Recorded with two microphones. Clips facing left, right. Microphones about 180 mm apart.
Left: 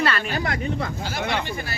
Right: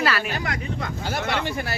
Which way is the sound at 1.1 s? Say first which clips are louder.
Right 3 dB; 65° right (ahead or behind).